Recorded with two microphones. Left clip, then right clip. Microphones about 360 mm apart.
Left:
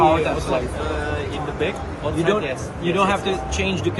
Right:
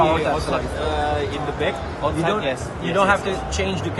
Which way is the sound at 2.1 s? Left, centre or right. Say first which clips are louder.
Left 4 dB; right.